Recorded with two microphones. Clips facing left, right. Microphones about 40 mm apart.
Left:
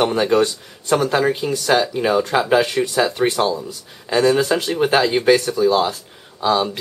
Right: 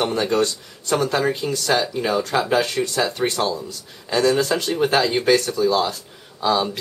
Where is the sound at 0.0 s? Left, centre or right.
Centre.